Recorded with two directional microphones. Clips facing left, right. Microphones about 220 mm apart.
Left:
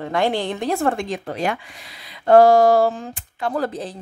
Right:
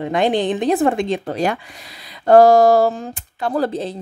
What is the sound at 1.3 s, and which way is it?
Speech, 40° right (ahead or behind).